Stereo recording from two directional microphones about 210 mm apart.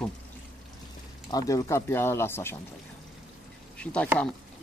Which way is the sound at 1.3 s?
15° left (ahead or behind).